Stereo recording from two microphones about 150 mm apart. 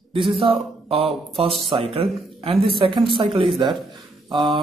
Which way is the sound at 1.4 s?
40° right (ahead or behind).